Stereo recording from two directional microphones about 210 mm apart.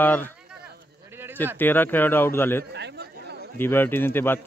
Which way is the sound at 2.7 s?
55° right (ahead or behind).